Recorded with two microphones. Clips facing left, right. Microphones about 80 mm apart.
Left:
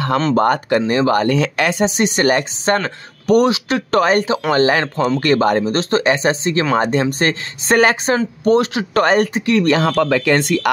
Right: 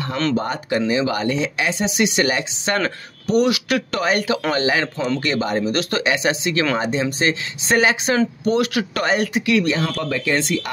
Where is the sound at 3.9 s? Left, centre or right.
Left.